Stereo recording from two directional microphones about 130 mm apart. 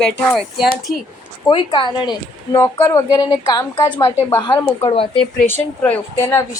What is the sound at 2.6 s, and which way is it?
A woman's voice, 20° left (ahead or behind).